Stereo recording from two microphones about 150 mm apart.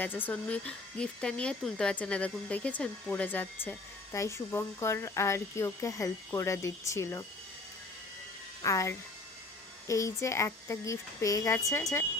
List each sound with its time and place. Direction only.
0.0 s speech: 10° left (ahead or behind)
8.6 s speech: 20° left (ahead or behind)